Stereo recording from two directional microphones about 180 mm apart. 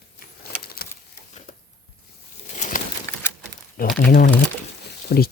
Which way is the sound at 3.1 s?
15° left (ahead or behind).